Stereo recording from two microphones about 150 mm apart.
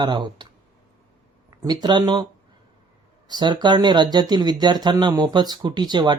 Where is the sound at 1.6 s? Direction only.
30° right (ahead or behind).